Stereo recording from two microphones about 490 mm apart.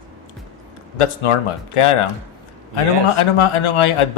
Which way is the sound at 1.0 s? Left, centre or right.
Left.